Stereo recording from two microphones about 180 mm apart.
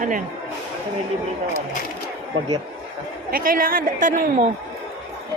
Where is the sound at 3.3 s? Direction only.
50° right (ahead or behind).